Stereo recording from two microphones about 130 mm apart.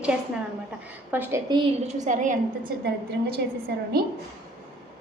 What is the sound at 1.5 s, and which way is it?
Speech, 35° right (ahead or behind).